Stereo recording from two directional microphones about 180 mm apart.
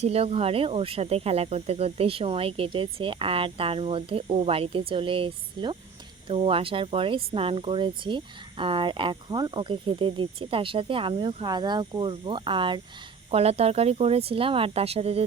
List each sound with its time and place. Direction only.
0.0 s speech: 35° right (ahead or behind)